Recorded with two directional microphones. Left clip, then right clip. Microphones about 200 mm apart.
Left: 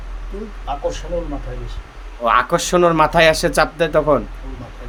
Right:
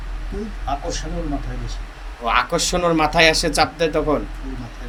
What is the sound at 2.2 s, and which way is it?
Speech, 40° left (ahead or behind).